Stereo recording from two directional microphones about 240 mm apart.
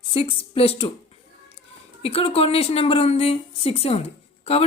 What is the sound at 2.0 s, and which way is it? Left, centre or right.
A woman's voice, left.